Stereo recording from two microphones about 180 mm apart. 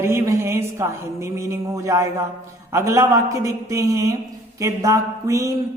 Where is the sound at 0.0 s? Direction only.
15° right (ahead or behind).